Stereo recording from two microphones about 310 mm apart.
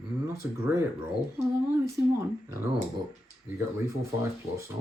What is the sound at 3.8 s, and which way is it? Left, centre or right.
Speech, centre.